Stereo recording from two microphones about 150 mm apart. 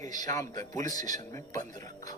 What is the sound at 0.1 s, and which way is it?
A man's voice, 25° left (ahead or behind).